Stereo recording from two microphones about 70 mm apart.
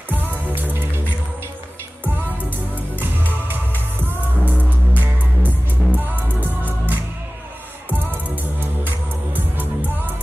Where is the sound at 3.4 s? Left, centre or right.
Right.